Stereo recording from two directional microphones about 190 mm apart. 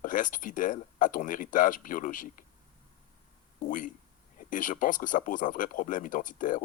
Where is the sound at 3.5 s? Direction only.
45° left (ahead or behind).